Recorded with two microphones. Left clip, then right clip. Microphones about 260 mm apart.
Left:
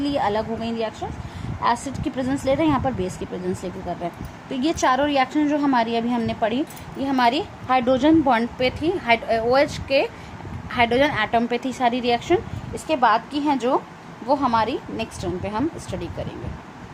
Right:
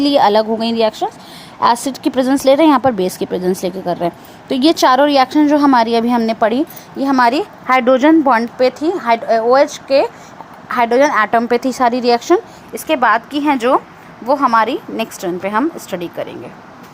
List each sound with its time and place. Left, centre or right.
0.0 s a woman's voice: right